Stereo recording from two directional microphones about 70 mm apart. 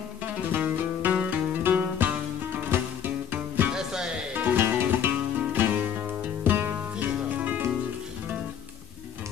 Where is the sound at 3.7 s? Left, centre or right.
Centre.